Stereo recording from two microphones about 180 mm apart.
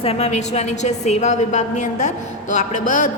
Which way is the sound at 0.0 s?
35° left (ahead or behind).